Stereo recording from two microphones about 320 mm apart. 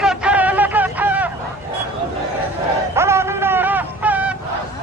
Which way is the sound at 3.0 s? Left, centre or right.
Centre.